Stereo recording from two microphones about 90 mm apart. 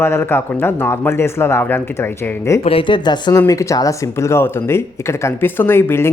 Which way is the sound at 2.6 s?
80° left.